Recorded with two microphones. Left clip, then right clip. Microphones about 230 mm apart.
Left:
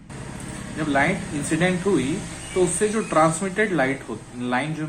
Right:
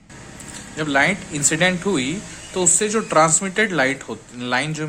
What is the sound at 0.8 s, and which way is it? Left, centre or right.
Speech, right.